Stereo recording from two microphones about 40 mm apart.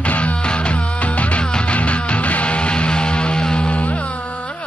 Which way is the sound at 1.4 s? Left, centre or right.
Left.